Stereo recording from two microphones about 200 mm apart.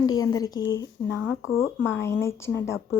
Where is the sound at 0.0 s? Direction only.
20° left (ahead or behind).